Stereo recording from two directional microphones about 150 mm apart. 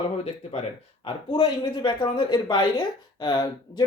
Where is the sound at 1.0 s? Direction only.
35° left (ahead or behind).